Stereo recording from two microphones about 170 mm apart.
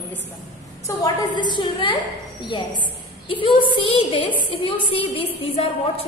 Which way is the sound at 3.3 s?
30° left (ahead or behind).